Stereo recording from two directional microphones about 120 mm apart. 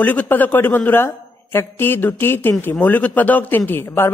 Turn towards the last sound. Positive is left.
turn(degrees=20)  # may be behind; listen again after turning